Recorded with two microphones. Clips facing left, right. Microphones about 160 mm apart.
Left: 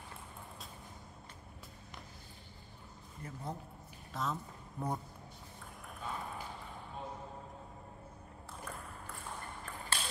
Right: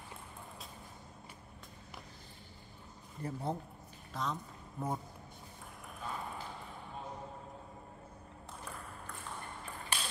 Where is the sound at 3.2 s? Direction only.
30° right (ahead or behind).